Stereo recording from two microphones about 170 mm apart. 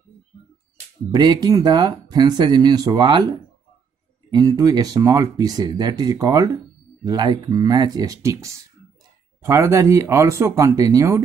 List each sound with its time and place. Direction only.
1.1 s speech: 25° right (ahead or behind)